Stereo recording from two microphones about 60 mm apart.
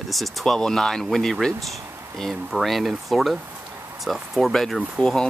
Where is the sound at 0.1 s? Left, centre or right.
Centre.